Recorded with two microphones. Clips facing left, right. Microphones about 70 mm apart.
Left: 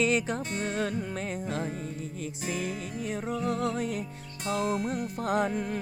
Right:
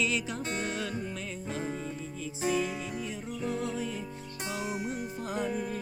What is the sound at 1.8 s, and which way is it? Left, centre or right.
Music, left.